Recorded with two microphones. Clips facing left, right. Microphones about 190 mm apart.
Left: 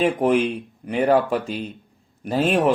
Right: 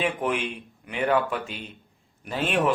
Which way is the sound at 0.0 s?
35° left (ahead or behind).